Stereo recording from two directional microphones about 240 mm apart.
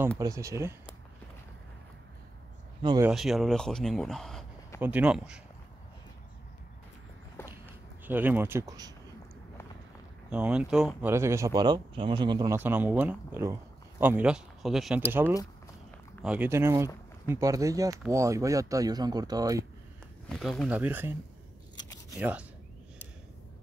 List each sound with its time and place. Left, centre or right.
0.2 s speech: centre
2.8 s speech: centre
3.1 s speech: centre
8.0 s speech: centre
10.3 s speech: centre
16.2 s speech: centre
20.2 s speech: centre
22.1 s speech: centre